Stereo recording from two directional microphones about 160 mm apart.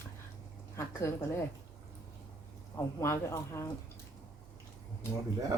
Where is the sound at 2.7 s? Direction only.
15° left (ahead or behind).